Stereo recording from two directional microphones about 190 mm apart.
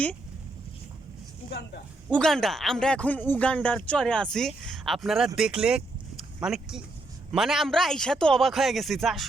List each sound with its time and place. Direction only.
1.5 s speech: 60° left (ahead or behind)
2.1 s speech: centre (ahead or behind)